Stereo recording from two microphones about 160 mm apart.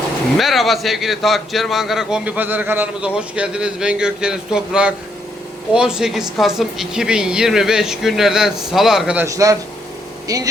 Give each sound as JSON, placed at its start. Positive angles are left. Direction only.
{"t": 0.3, "sound": "a man's voice", "side_deg": 0}
{"t": 9.2, "sound": "speech", "side_deg": -20}